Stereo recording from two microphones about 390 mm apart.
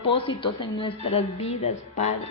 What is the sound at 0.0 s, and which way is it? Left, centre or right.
A woman's voice, centre.